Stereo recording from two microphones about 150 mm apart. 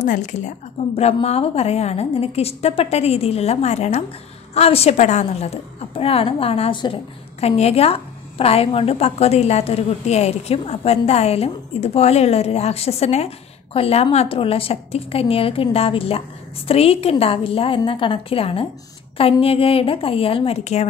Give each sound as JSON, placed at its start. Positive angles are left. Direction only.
{"t": 0.0, "sound": "a woman's voice", "side_deg": 55}